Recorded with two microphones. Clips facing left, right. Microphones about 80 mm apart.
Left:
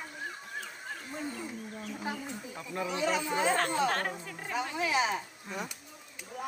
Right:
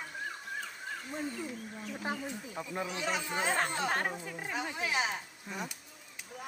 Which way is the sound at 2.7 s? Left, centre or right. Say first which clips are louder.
Left 5 dB; centre.